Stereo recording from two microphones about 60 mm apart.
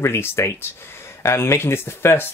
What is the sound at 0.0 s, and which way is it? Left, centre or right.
Speech, left.